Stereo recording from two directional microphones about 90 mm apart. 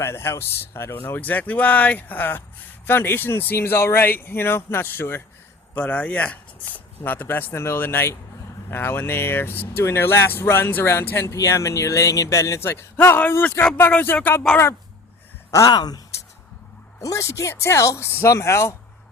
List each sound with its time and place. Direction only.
0.0 s speech: 30° left (ahead or behind)
13.1 s speech: 20° left (ahead or behind)
15.4 s speech: 45° left (ahead or behind)
17.0 s speech: 35° left (ahead or behind)